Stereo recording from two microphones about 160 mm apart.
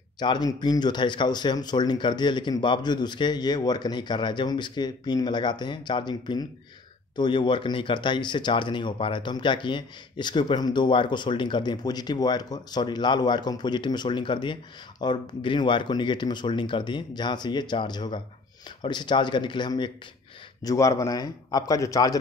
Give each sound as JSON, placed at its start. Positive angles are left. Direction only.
{"t": 0.2, "sound": "speech", "side_deg": 25}